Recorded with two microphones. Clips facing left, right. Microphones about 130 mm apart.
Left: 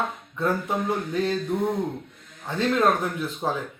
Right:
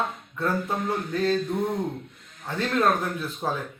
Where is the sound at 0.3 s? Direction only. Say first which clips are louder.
Left 2 dB; 15° left (ahead or behind).